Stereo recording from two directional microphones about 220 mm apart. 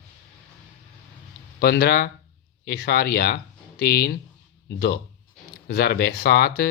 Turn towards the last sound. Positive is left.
turn(degrees=45)  # may be behind; listen again after turning